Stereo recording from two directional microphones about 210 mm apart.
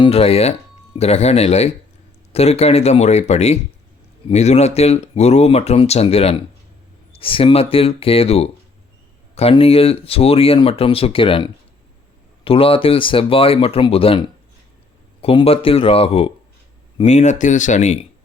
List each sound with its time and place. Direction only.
0.0 s speech: 30° left (ahead or behind)